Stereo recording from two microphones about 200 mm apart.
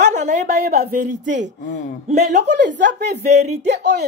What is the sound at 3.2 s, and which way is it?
Speech, 35° right (ahead or behind).